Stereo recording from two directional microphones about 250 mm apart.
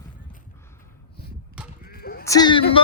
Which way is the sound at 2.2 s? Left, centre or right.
Centre.